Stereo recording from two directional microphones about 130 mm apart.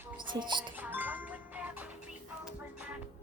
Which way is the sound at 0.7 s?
15° right (ahead or behind).